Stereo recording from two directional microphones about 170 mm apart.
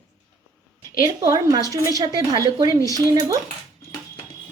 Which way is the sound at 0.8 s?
20° right (ahead or behind).